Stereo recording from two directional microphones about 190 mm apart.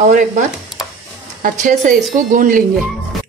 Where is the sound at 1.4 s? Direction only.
45° right (ahead or behind).